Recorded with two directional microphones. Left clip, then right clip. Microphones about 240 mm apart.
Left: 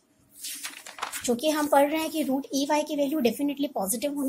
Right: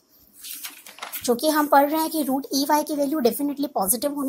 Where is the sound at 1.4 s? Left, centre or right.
Right.